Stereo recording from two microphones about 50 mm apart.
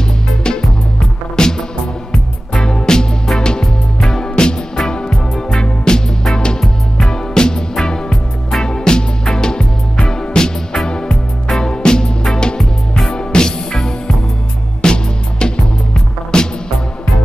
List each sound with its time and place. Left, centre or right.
0.6 s music: centre
13.1 s music: centre